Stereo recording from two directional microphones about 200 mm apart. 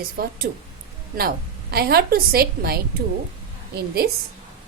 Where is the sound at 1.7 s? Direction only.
50° right (ahead or behind).